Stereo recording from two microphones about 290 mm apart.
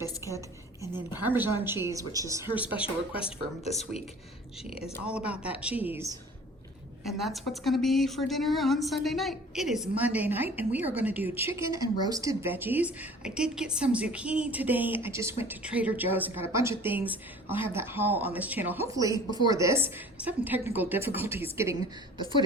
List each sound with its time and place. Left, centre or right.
1.2 s speech: centre
2.8 s speech: centre
4.7 s a woman's voice: centre